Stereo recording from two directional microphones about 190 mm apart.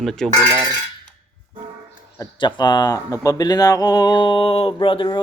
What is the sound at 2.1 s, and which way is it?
Speech, 20° left (ahead or behind).